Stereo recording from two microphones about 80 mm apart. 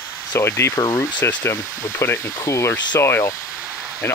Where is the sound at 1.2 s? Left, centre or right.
Left.